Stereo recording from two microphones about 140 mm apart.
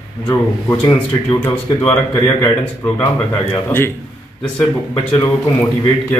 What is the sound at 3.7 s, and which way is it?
Speech, 15° left (ahead or behind).